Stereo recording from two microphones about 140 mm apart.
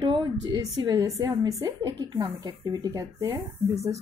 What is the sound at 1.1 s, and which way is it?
A woman's voice, 20° right (ahead or behind).